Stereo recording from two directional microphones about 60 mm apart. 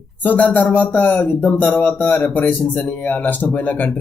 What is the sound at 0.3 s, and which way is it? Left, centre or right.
Speech, left.